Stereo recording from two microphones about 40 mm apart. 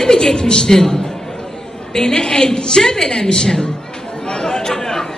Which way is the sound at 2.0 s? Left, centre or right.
Centre.